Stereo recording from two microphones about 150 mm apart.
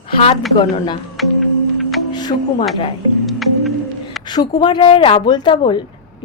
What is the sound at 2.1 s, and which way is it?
Speech, 30° left (ahead or behind).